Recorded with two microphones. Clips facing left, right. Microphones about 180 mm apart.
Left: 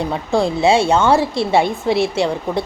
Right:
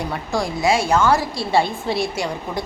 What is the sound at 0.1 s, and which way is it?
Speech, 25° left (ahead or behind).